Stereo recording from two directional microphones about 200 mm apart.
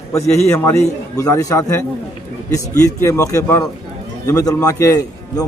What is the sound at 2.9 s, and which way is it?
A man's voice, 15° left (ahead or behind).